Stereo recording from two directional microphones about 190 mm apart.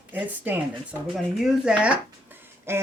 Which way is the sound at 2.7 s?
15° right (ahead or behind).